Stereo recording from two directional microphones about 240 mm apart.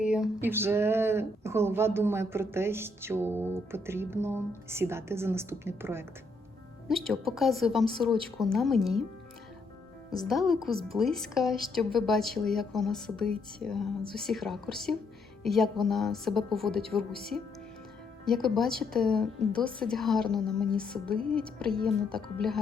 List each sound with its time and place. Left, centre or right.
0.0 s speech: centre
6.8 s a woman's voice: centre
10.2 s a woman's voice: centre